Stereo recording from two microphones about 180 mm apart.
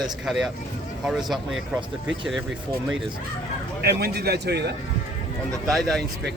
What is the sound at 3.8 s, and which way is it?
Speech, 60° right (ahead or behind).